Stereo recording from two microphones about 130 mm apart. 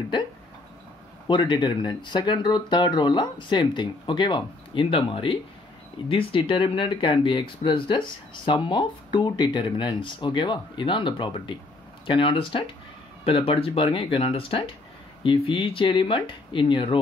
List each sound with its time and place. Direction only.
1.2 s speech: 35° left (ahead or behind)